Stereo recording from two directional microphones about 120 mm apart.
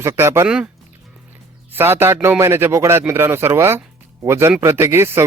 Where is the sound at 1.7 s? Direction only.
20° right (ahead or behind).